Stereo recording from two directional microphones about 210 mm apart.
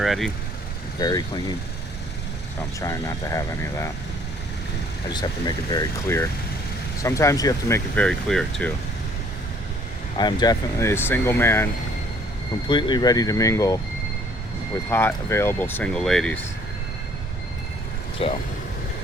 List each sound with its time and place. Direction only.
0.0 s speech: centre (ahead or behind)
0.9 s speech: 20° left (ahead or behind)
2.6 s speech: 15° left (ahead or behind)
5.0 s speech: 20° left (ahead or behind)
7.9 s speech: 5° left (ahead or behind)
10.2 s speech: 20° left (ahead or behind)
12.6 s speech: 20° left (ahead or behind)
14.8 s speech: 10° left (ahead or behind)
18.2 s speech: 25° left (ahead or behind)